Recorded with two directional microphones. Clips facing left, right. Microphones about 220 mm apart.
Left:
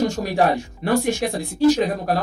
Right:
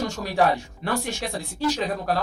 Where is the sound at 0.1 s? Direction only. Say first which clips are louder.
Left 3 dB; 45° left (ahead or behind).